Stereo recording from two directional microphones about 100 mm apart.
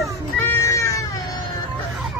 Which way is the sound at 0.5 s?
30° left (ahead or behind).